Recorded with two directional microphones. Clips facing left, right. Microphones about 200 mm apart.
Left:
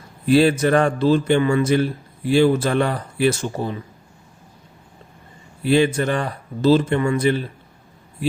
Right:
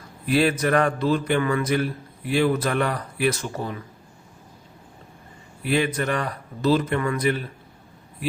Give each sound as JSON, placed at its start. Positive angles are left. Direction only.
{"t": 0.3, "sound": "a man's voice", "side_deg": 30}
{"t": 5.6, "sound": "a man's voice", "side_deg": 30}